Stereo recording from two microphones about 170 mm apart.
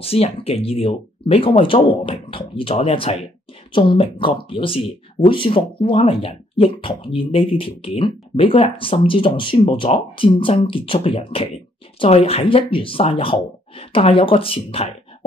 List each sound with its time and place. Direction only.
0.0 s speech: 35° left (ahead or behind)